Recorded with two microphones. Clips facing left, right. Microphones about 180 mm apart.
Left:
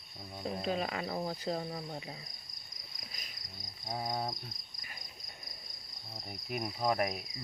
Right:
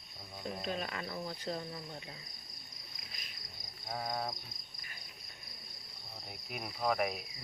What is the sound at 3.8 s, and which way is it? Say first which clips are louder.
Cricket: left 2 dB; 15° left (ahead or behind).